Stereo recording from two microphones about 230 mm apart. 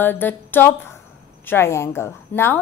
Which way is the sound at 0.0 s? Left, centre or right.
Centre.